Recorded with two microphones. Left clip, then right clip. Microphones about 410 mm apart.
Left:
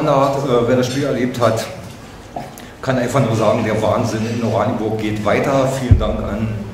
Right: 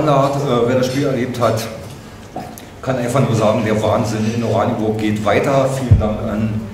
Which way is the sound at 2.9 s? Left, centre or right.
Centre.